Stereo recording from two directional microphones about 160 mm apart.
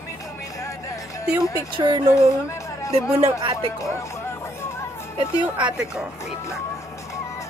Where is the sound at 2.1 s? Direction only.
20° left (ahead or behind).